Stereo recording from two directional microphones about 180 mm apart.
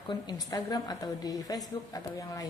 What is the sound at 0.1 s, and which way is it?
A woman's voice, 20° left (ahead or behind).